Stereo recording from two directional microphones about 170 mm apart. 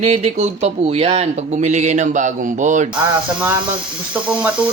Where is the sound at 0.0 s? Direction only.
35° right (ahead or behind).